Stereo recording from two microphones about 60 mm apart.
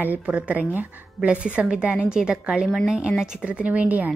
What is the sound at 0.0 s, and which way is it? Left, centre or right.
A woman's voice, right.